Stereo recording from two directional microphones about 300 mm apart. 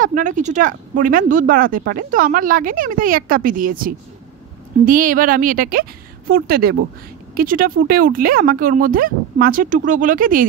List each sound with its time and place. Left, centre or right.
0.0 s speech: right